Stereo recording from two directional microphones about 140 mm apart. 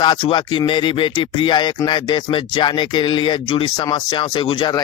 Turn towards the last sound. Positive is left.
turn(degrees=35)  # may be behind; listen again after turning